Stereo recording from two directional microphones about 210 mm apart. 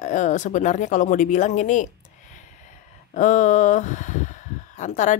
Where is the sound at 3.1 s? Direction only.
35° left (ahead or behind).